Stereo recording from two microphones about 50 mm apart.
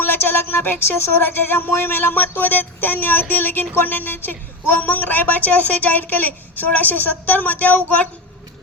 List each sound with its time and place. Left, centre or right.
0.0 s a woman's voice: left